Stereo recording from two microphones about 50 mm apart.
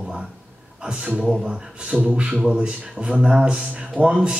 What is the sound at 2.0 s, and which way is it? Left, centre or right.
Speech, centre.